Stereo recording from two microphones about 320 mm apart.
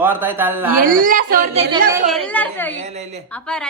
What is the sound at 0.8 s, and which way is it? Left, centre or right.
Speech, right.